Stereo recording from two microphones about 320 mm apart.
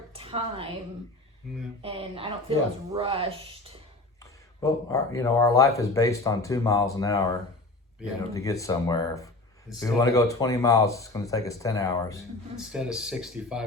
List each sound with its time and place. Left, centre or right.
0.1 s a sound: centre
1.8 s speech: centre
4.2 s speech: centre
8.3 s speech: centre
12.5 s speech: centre